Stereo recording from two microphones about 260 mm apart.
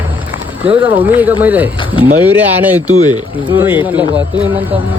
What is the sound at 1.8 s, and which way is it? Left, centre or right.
Speech, centre.